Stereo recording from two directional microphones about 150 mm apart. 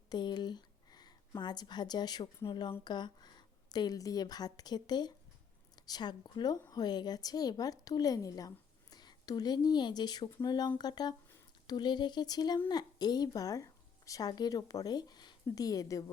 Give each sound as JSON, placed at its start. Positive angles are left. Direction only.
{"t": 0.1, "sound": "speech", "side_deg": 30}